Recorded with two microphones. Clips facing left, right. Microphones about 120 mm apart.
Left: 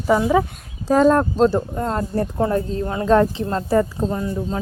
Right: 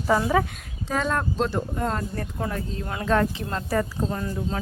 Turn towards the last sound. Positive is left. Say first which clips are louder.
# left 5 dB
turn(degrees=20)  # may be behind; listen again after turning